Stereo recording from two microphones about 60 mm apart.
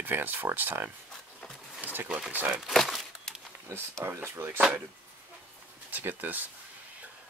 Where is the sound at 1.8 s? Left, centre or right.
Right.